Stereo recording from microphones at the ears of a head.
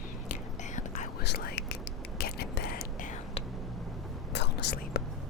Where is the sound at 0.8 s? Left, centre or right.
Left.